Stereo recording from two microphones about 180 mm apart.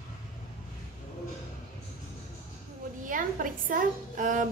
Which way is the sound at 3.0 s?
50° right (ahead or behind).